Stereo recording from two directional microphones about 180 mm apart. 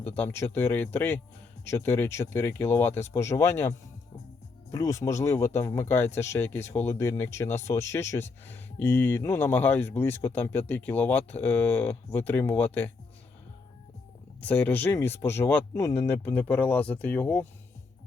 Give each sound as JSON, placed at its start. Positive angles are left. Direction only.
{"t": 0.2, "sound": "speech", "side_deg": 10}
{"t": 14.4, "sound": "speech", "side_deg": 10}